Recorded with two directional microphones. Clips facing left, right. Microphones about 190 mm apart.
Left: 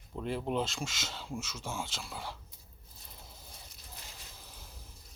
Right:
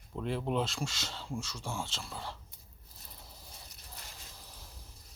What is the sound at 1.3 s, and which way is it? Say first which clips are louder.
Speech: right 2 dB; 20° left (ahead or behind).